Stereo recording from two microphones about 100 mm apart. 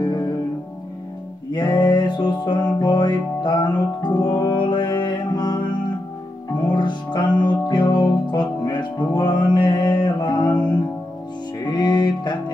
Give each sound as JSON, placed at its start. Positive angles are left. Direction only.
{"t": 1.5, "sound": "music", "side_deg": 45}
{"t": 11.6, "sound": "music", "side_deg": 45}